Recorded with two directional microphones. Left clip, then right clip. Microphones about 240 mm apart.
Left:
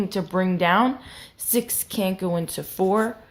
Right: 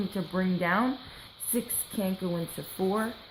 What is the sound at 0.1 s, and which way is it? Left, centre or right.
A woman's voice, left.